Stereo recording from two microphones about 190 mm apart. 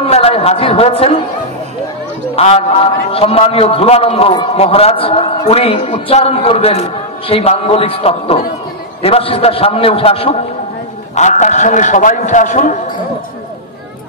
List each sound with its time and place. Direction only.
0.0 s speech: 30° left (ahead or behind)
2.3 s a man's voice: 30° left (ahead or behind)